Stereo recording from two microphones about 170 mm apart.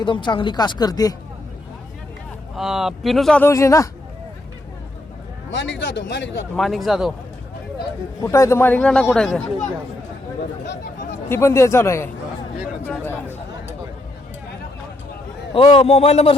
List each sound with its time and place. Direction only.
0.0 s speech: 25° left (ahead or behind)
2.6 s speech: centre (ahead or behind)
3.4 s a man's voice: 15° left (ahead or behind)
5.5 s speech: 90° left
6.6 s speech: centre (ahead or behind)
8.2 s a man's voice: 15° left (ahead or behind)
11.3 s a man's voice: 15° left (ahead or behind)
15.5 s a man's voice: 30° left (ahead or behind)